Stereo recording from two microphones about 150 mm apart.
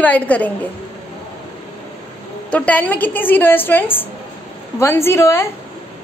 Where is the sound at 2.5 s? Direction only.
10° left (ahead or behind).